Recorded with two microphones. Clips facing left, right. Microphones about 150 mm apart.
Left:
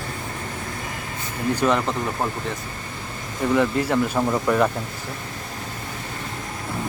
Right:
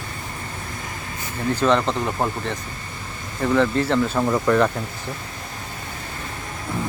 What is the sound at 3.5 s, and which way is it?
Speech, 10° left (ahead or behind).